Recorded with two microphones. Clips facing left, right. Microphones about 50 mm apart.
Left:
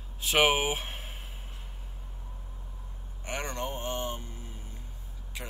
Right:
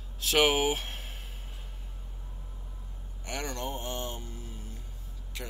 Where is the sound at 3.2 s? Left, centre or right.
Left.